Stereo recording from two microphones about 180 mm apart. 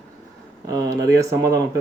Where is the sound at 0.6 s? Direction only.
20° right (ahead or behind).